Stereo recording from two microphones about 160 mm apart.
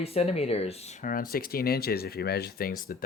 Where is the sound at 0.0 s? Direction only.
40° left (ahead or behind).